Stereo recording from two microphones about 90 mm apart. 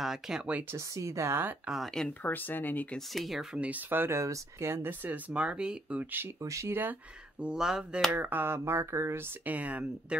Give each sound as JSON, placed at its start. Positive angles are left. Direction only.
{"t": 0.0, "sound": "speech", "side_deg": -5}
{"t": 0.5, "sound": "speech", "side_deg": -15}
{"t": 0.7, "sound": "speech", "side_deg": -35}
{"t": 2.2, "sound": "speech", "side_deg": 20}
{"t": 3.1, "sound": "speech", "side_deg": 0}
{"t": 3.5, "sound": "speech", "side_deg": -15}
{"t": 6.4, "sound": "speech", "side_deg": -35}
{"t": 6.8, "sound": "speech", "side_deg": -15}
{"t": 8.1, "sound": "speech", "side_deg": -20}
{"t": 9.4, "sound": "speech", "side_deg": -15}